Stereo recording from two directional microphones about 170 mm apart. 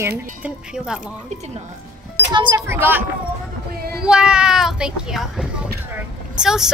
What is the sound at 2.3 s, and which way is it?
Speech, 25° right (ahead or behind).